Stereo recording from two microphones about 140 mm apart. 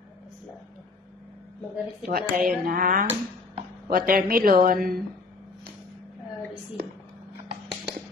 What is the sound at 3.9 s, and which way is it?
Speech, 90° right.